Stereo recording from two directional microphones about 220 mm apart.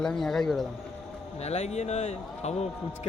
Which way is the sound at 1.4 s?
30° left (ahead or behind).